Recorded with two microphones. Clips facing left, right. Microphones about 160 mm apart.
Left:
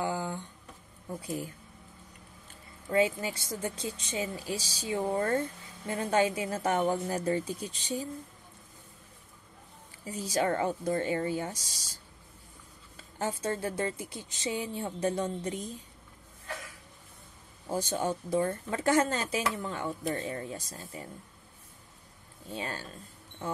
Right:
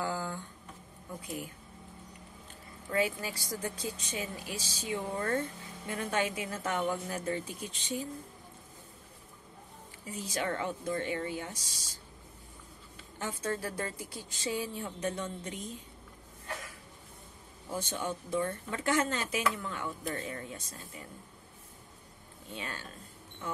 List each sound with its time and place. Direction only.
0.0 s a sound: 20° left (ahead or behind)
1.2 s speech: 35° left (ahead or behind)
2.9 s speech: 25° left (ahead or behind)
10.2 s speech: 40° left (ahead or behind)
13.2 s speech: 25° left (ahead or behind)
17.6 s speech: 40° left (ahead or behind)
22.5 s speech: 35° left (ahead or behind)